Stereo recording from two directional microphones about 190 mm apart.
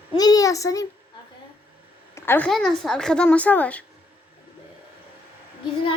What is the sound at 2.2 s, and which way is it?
A woman's voice, 10° left (ahead or behind).